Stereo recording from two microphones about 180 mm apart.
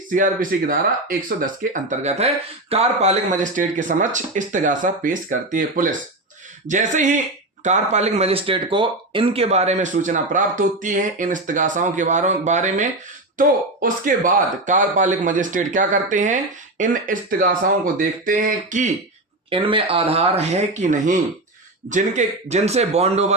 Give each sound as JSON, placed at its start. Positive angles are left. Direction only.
{"t": 0.1, "sound": "speech", "side_deg": -50}
{"t": 19.5, "sound": "speech", "side_deg": -30}